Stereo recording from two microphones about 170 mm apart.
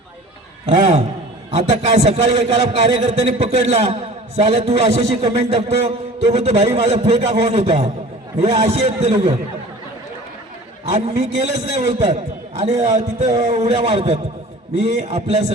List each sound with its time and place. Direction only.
1.5 s a man's voice: 40° right (ahead or behind)
10.8 s a man's voice: 40° right (ahead or behind)